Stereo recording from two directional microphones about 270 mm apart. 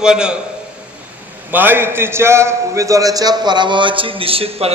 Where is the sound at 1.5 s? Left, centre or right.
Centre.